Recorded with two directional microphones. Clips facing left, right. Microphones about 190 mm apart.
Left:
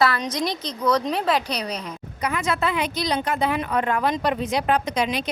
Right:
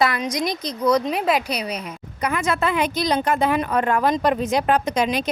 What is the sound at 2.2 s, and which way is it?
A woman's voice, 50° right (ahead or behind).